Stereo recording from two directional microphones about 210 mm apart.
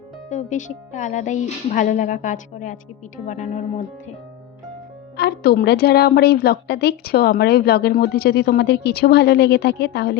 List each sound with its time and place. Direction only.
0.3 s speech: 35° left (ahead or behind)
5.1 s a woman's voice: 50° left (ahead or behind)